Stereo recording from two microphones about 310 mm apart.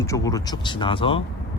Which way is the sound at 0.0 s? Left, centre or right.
Centre.